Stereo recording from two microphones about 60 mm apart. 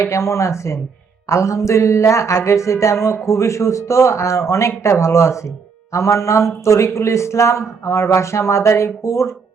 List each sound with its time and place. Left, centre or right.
0.0 s speech: left